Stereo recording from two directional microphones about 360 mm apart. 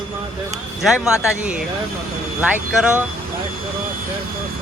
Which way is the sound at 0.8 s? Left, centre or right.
Centre.